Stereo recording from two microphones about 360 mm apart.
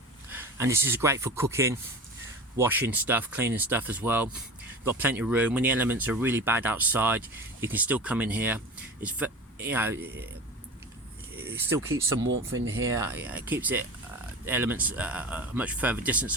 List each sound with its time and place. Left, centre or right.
0.3 s speech: centre
11.3 s speech: centre
12.5 s speech: right
12.8 s speech: centre